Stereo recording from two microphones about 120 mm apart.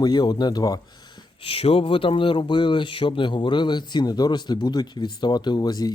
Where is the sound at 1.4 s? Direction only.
50° left (ahead or behind); by 5.9 s 35° left (ahead or behind).